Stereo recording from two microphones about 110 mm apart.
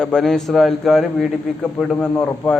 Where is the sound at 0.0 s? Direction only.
5° left (ahead or behind).